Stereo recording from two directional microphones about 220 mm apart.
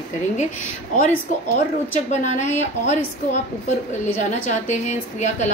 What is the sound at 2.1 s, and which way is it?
A woman's voice, 30° left (ahead or behind).